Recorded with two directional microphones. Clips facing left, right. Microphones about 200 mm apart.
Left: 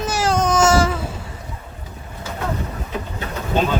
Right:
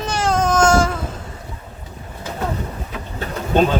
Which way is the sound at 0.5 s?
5° left (ahead or behind).